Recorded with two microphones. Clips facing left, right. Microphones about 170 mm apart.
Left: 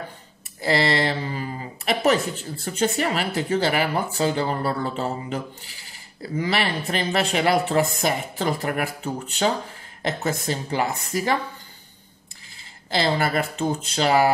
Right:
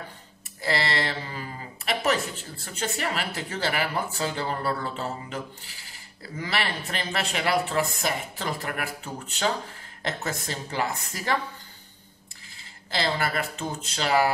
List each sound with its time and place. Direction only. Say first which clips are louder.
0.6 s speech: left 6 dB; 20° left (ahead or behind)
12.9 s speech: left 5 dB; 20° left (ahead or behind)